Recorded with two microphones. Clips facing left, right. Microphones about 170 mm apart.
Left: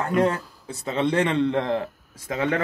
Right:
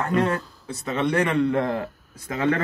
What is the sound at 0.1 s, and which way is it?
Speech, 15° left (ahead or behind).